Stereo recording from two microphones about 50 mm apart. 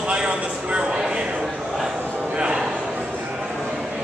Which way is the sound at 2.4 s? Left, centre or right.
Centre.